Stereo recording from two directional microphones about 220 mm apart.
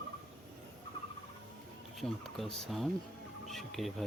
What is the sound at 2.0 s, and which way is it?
Speech, centre (ahead or behind).